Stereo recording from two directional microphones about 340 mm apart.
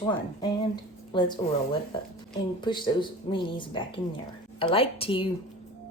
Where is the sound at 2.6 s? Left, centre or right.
Centre.